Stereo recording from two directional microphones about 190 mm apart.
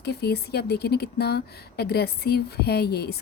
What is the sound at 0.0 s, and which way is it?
Speech, 60° left (ahead or behind).